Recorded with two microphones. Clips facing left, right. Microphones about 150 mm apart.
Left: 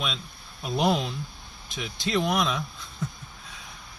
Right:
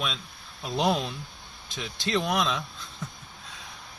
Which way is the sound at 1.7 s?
15° left (ahead or behind).